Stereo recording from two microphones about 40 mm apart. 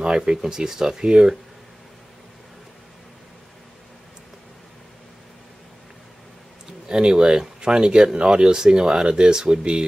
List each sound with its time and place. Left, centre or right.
0.0 s speech: centre
6.9 s speech: centre